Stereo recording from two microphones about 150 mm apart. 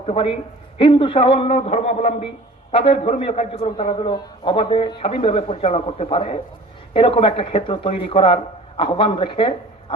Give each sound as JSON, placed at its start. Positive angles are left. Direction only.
{"t": 0.0, "sound": "a man's voice", "side_deg": 40}
{"t": 3.9, "sound": "a man's voice", "side_deg": 30}